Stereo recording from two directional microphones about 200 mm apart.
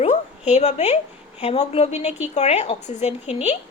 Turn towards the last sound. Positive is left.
turn(degrees=30)  # may be behind; listen again after turning